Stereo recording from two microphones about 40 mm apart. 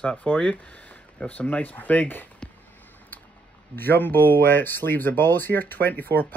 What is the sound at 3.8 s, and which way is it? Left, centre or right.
Speech, left.